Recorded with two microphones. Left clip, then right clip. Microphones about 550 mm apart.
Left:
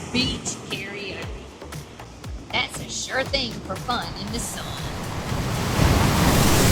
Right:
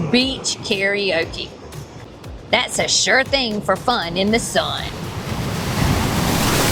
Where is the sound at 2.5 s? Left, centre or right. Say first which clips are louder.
Right 9 dB; right.